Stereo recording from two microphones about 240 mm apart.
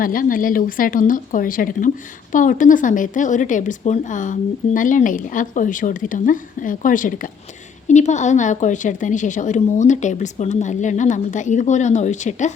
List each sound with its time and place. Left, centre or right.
0.0 s speech: left